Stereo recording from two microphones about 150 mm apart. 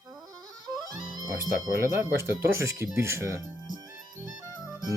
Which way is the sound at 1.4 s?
20° right (ahead or behind).